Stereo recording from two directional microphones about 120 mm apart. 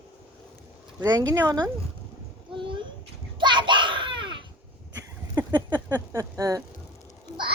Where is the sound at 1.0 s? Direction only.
35° right (ahead or behind).